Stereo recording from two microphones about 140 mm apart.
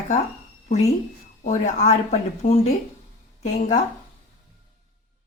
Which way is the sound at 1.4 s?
60° left (ahead or behind).